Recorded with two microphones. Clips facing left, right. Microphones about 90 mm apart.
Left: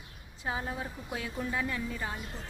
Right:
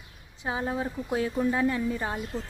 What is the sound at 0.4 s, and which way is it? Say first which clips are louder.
A woman's voice: right 6 dB; 25° right (ahead or behind).